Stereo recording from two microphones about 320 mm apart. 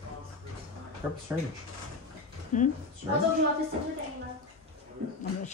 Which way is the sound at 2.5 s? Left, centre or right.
Left.